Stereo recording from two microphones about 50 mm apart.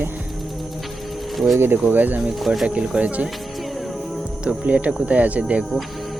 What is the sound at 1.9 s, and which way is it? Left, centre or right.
Speech, right.